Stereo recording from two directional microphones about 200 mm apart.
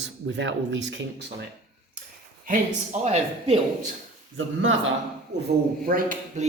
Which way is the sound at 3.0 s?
30° right (ahead or behind).